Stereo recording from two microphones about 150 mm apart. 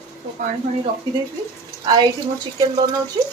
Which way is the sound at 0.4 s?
60° right (ahead or behind).